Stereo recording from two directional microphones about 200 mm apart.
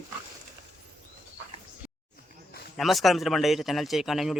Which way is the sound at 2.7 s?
Centre (ahead or behind).